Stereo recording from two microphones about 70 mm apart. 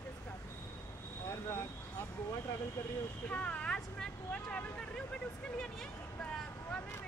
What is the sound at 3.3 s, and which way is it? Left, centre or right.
Speech, centre.